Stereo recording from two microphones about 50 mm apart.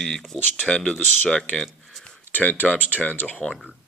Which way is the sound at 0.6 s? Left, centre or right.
Centre.